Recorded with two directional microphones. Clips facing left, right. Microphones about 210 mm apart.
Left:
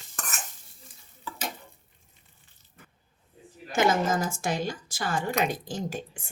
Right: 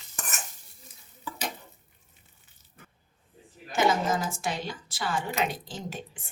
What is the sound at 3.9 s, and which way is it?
Speech, 45° left (ahead or behind).